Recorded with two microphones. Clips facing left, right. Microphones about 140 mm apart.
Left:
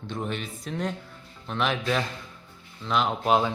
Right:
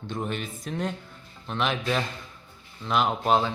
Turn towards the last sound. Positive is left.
turn(degrees=-5)  # may be behind; listen again after turning